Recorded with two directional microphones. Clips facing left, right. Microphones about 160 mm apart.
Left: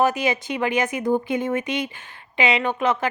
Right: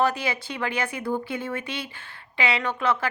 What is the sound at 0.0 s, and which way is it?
A woman's voice, 15° left (ahead or behind).